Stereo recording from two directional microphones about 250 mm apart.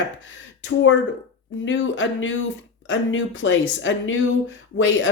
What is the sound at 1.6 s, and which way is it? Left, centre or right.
Speech, left.